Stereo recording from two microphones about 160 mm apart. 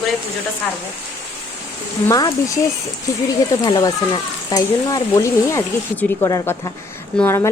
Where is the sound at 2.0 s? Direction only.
20° left (ahead or behind).